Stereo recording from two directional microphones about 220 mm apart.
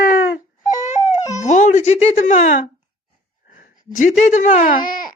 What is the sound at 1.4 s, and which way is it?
Speech, 35° left (ahead or behind).